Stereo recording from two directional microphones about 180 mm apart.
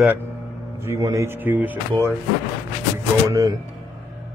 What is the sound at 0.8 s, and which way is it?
Speech, 15° right (ahead or behind).